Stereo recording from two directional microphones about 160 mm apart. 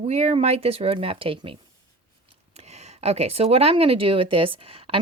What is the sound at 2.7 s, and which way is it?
A woman's voice, 40° right (ahead or behind).